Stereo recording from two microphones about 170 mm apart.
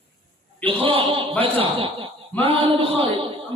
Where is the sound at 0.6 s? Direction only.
30° right (ahead or behind).